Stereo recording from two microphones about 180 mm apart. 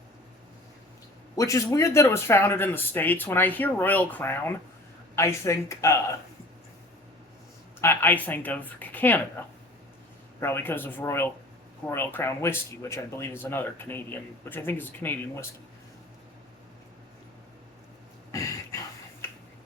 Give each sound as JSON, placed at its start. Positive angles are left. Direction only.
{"t": 1.4, "sound": "speech", "side_deg": 15}
{"t": 7.8, "sound": "speech", "side_deg": 10}
{"t": 10.4, "sound": "speech", "side_deg": 10}
{"t": 18.3, "sound": "a sound", "side_deg": 15}
{"t": 19.2, "sound": "finger snapping", "side_deg": 15}